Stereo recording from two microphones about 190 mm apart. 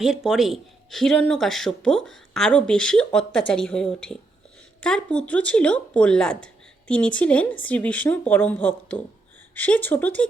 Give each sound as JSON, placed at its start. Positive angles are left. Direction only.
{"t": 0.0, "sound": "a woman's voice", "side_deg": 0}